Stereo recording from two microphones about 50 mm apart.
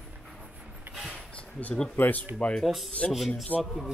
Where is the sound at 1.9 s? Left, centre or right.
Left.